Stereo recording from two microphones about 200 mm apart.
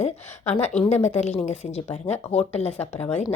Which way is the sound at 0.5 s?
30° left (ahead or behind).